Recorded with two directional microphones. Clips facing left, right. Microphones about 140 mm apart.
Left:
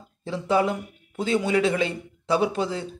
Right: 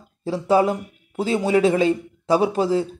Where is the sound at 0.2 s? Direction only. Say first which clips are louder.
Right 5 dB; 35° right (ahead or behind).